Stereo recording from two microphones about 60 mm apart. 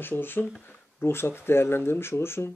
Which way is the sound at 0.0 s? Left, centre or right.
Left.